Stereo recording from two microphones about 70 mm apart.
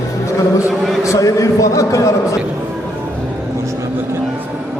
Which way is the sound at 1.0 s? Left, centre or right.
Left.